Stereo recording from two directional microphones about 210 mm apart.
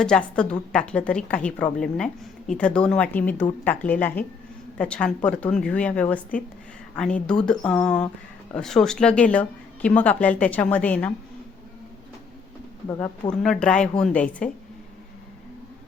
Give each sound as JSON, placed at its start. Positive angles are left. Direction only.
{"t": 0.0, "sound": "speech", "side_deg": 5}
{"t": 13.3, "sound": "speech", "side_deg": 5}